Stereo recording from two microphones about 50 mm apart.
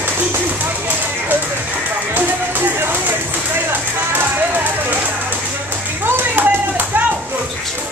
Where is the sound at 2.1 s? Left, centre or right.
Right.